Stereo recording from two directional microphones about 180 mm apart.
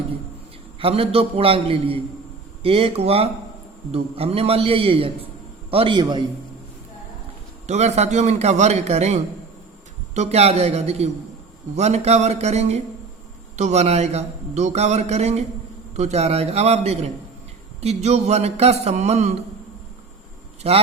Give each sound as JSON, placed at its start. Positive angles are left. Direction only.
{"t": 0.8, "sound": "a man's voice", "side_deg": -30}
{"t": 7.7, "sound": "speech", "side_deg": -40}
{"t": 20.6, "sound": "a man's voice", "side_deg": -35}